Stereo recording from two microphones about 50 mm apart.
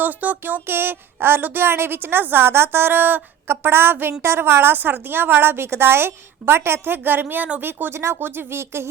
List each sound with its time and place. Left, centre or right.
0.0 s a sound: right
0.7 s a woman's voice: right
8.2 s speech: right